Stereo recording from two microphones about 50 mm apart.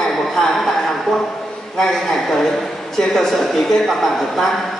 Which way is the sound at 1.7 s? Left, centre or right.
Centre.